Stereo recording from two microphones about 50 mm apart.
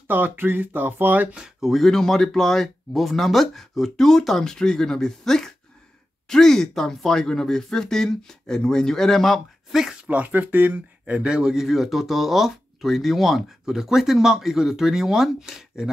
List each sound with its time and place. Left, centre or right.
0.1 s speech: right
1.3 s speech: centre
1.7 s speech: centre
10.0 s speech: right
11.2 s speech: centre